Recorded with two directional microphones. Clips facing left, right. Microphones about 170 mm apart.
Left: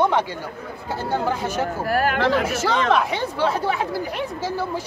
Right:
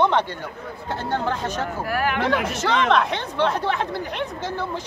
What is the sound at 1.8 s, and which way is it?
Speech, 40° left (ahead or behind).